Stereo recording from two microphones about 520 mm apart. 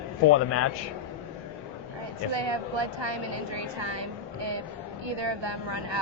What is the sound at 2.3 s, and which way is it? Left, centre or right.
Speech, right.